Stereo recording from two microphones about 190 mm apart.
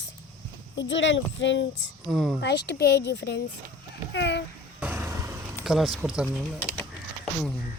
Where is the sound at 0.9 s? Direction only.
75° left (ahead or behind).